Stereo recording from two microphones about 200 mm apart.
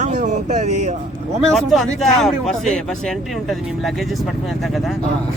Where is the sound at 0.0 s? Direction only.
35° right (ahead or behind).